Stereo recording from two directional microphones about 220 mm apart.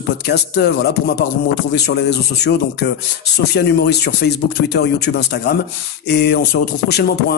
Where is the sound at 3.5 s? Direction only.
50° left (ahead or behind).